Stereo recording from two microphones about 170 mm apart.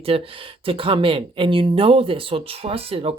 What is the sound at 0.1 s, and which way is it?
Speech, 35° right (ahead or behind).